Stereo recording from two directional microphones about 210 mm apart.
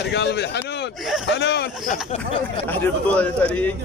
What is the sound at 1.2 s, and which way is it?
Speech, 55° left (ahead or behind).